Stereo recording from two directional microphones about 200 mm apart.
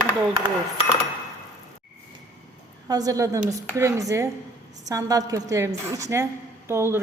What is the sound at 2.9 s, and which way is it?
A woman's voice, 20° right (ahead or behind).